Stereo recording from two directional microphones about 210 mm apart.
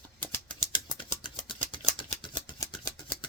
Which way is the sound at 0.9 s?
25° left (ahead or behind).